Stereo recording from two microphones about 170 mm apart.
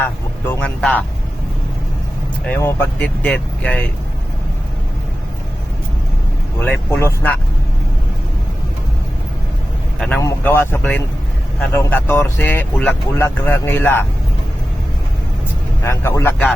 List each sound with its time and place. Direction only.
0.0 s speech: 10° left (ahead or behind)
2.5 s speech: 15° left (ahead or behind)
6.6 s speech: 15° left (ahead or behind)
10.2 s speech: 15° left (ahead or behind)
15.8 s speech: 15° left (ahead or behind)